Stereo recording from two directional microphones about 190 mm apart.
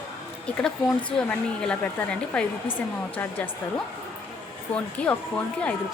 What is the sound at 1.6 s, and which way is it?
A woman's voice, 5° left (ahead or behind).